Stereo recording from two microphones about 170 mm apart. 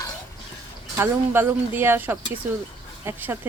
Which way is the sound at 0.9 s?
15° right (ahead or behind).